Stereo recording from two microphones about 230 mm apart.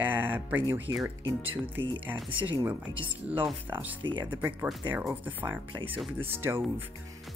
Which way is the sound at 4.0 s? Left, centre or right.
Right.